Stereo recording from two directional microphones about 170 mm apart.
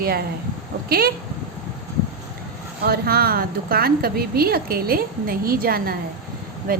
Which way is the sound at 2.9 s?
65° right (ahead or behind).